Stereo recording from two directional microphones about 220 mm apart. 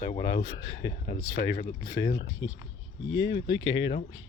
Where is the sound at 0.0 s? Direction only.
20° left (ahead or behind).